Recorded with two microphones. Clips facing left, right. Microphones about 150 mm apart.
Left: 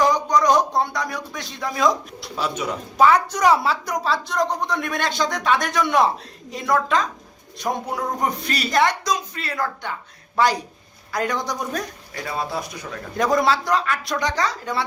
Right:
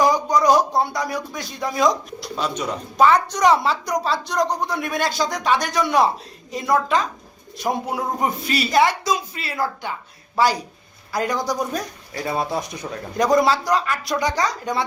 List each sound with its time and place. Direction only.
0.0 s speech: 10° right (ahead or behind)
11.1 s speech: centre (ahead or behind)
12.1 s speech: 25° right (ahead or behind)
13.1 s speech: centre (ahead or behind); by 14.8 s 15° right (ahead or behind)